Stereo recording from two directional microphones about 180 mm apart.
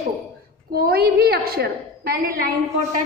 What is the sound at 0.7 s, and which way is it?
A woman's voice, 60° right (ahead or behind).